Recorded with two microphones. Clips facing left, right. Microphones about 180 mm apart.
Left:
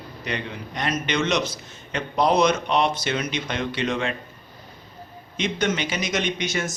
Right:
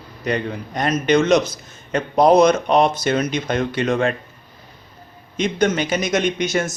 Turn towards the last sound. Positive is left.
turn(degrees=-50)  # may be behind; listen again after turning